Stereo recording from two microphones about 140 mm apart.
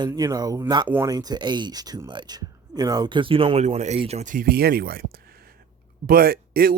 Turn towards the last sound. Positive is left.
turn(degrees=-90)